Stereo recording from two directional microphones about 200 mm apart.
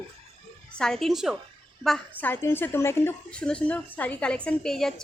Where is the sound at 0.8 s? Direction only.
Centre (ahead or behind).